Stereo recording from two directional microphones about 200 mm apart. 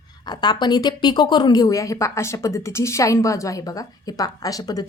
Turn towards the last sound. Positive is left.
turn(degrees=20)  # may be behind; listen again after turning